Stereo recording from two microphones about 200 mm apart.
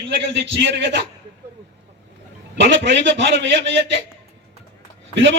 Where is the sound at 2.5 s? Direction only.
60° right (ahead or behind).